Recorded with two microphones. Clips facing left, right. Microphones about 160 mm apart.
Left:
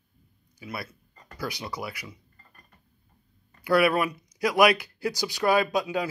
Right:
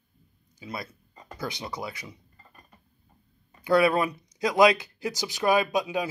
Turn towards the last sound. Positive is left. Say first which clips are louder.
# even
turn(degrees=-20)  # may be behind; listen again after turning